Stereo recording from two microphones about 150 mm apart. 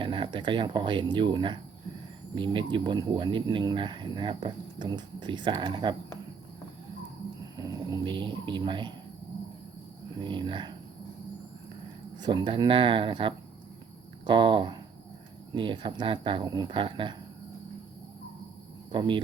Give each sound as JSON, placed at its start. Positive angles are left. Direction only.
{"t": 0.0, "sound": "speech", "side_deg": -35}
{"t": 7.5, "sound": "speech", "side_deg": -25}
{"t": 10.2, "sound": "speech", "side_deg": -30}
{"t": 12.2, "sound": "speech", "side_deg": -30}
{"t": 18.9, "sound": "speech", "side_deg": -30}